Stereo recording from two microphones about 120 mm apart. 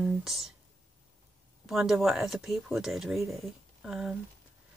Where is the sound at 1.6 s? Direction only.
5° right (ahead or behind).